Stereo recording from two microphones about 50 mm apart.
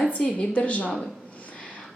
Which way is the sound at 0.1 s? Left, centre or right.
Left.